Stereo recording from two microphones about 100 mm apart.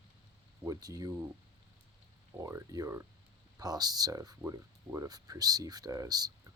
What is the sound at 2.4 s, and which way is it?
Speech, 30° right (ahead or behind).